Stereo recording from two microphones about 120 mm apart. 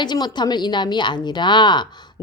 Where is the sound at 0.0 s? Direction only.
40° left (ahead or behind).